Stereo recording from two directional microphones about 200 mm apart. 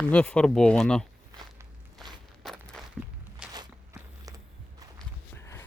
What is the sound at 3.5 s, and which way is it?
Walk, 20° right (ahead or behind).